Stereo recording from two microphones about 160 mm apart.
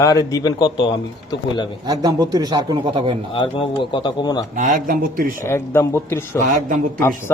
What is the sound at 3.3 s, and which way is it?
Speech, 30° left (ahead or behind).